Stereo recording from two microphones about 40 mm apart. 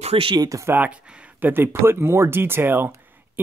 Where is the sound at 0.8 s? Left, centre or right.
Right.